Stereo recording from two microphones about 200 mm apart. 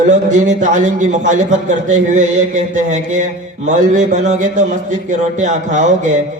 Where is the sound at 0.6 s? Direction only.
40° right (ahead or behind).